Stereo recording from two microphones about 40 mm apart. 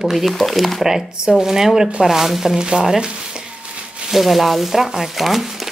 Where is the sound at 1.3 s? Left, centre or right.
Centre.